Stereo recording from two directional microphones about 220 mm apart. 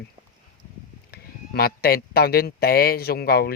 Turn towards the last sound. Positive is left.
turn(degrees=45)  # may be behind; listen again after turning